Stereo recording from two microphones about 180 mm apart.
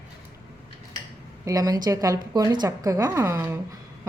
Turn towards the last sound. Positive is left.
turn(degrees=-15)  # may be behind; listen again after turning